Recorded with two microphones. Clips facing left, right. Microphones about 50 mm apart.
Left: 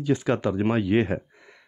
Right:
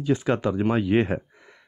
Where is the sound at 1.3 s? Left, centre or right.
Centre.